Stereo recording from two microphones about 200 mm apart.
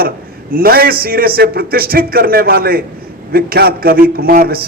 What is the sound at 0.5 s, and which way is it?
A man's voice, 50° right (ahead or behind).